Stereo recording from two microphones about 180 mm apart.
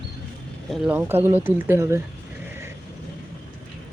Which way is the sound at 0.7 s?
5° right (ahead or behind).